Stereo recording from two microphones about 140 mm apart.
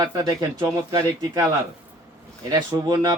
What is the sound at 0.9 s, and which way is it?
Speech, 25° right (ahead or behind).